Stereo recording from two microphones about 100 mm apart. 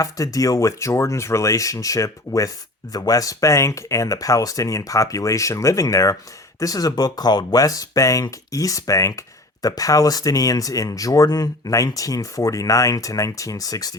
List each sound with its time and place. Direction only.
0.0 s speech: 35° left (ahead or behind)